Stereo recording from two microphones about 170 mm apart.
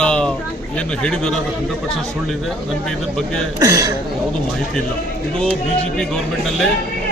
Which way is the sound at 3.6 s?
20° right (ahead or behind).